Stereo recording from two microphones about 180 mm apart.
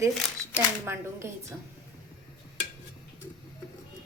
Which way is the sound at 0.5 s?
15° right (ahead or behind).